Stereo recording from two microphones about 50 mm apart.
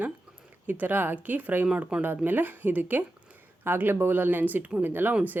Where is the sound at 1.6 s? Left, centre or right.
Right.